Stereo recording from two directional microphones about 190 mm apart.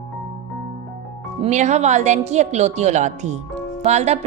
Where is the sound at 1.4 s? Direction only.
35° right (ahead or behind).